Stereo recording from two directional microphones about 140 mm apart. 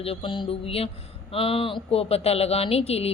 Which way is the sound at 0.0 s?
40° left (ahead or behind).